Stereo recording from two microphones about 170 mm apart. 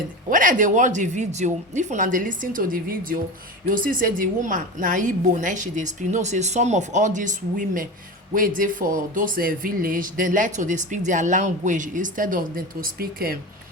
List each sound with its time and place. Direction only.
0.3 s speech: 50° right (ahead or behind)